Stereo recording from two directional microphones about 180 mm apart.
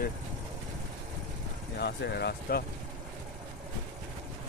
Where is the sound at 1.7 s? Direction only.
65° left (ahead or behind).